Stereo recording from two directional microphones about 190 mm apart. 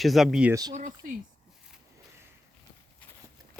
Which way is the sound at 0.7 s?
40° right (ahead or behind).